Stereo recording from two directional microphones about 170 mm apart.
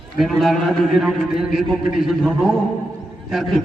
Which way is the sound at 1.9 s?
Centre (ahead or behind).